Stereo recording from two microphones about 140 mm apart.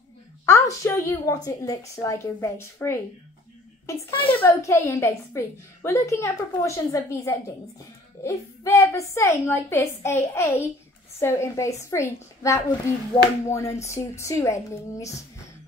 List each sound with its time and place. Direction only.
0.5 s a woman's voice: 20° left (ahead or behind)
4.1 s a woman's voice: 40° left (ahead or behind)
4.4 s a woman's voice: 20° left (ahead or behind)